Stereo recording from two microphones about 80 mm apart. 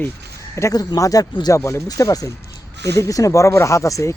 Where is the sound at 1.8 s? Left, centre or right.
Left.